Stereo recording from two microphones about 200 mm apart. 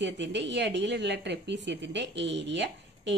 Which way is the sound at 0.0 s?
60° right (ahead or behind).